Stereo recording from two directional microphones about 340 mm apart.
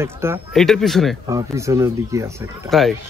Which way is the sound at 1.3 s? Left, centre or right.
Centre.